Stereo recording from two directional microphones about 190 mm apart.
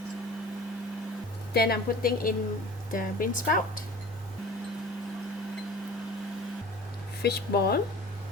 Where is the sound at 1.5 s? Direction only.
55° left (ahead or behind).